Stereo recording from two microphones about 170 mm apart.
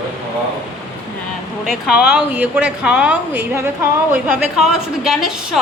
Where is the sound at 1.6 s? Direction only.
Centre (ahead or behind).